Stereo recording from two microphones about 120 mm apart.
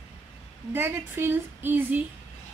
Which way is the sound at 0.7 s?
20° right (ahead or behind).